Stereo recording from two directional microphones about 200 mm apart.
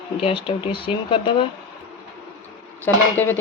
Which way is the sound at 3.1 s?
10° left (ahead or behind).